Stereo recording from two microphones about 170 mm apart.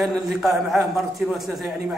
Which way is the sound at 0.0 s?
Centre (ahead or behind).